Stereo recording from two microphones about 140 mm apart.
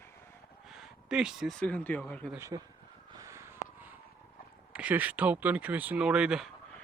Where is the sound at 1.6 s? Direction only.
10° left (ahead or behind).